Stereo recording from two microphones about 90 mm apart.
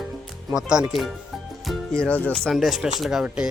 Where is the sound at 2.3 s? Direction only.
5° left (ahead or behind).